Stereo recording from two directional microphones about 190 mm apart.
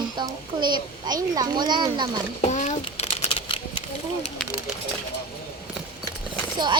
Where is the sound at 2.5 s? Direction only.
40° left (ahead or behind).